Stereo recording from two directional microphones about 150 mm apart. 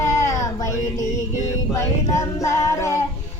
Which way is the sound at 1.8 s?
20° left (ahead or behind).